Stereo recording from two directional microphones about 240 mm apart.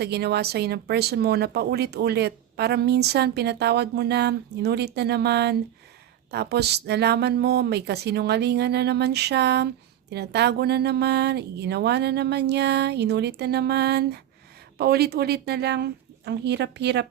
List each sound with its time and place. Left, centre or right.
0.0 s speech: right